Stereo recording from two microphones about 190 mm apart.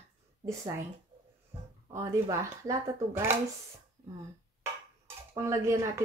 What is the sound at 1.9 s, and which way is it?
Speech, 15° right (ahead or behind).